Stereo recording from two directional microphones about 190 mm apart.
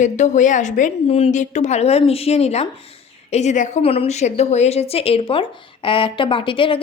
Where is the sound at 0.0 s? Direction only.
40° left (ahead or behind).